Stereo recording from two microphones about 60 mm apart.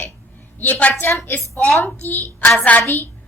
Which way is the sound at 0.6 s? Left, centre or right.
Left.